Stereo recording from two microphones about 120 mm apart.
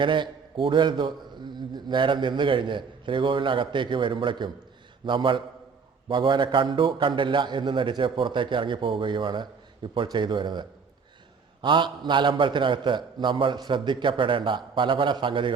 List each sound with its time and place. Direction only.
0.0 s a man's voice: 40° right (ahead or behind)